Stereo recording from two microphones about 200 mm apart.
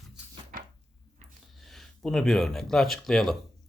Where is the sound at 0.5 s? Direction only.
45° right (ahead or behind).